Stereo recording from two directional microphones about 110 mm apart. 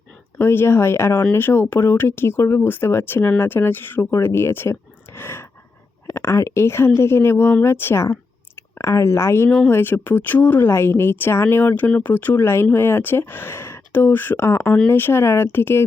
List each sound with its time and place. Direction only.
0.3 s speech: 25° left (ahead or behind)